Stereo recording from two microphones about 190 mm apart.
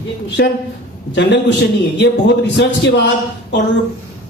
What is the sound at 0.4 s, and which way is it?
A man's voice, 60° left (ahead or behind).